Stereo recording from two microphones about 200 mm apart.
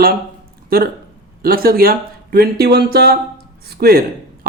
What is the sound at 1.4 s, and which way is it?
Speech, 50° right (ahead or behind).